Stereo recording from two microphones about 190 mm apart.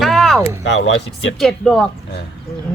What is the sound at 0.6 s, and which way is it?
Speech, 65° left (ahead or behind).